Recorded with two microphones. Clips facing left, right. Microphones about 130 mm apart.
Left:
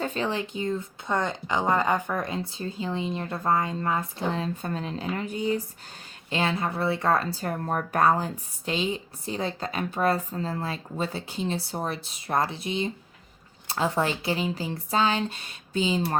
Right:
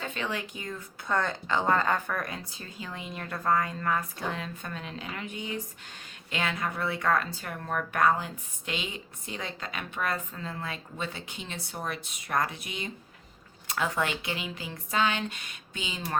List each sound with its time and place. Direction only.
0.0 s speech: 35° left (ahead or behind)